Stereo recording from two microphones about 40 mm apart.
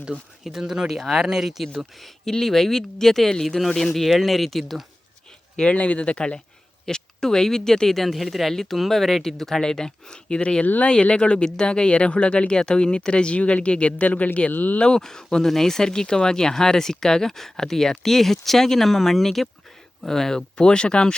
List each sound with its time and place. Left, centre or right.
0.1 s speech: right
0.6 s speech: centre
2.4 s speech: centre
3.9 s speech: centre
5.5 s speech: left
6.8 s speech: centre
14.5 s speech: left
14.8 s speech: centre